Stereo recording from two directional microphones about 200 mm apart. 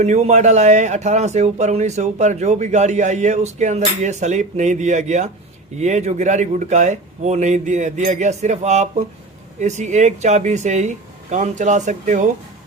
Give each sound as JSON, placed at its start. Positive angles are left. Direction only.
{"t": 0.0, "sound": "a man's voice", "side_deg": -35}